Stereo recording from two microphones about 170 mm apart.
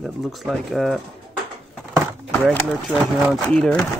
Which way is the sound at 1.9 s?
5° right (ahead or behind).